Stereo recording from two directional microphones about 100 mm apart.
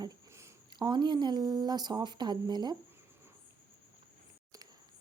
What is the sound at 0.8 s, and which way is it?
Speech, 45° right (ahead or behind).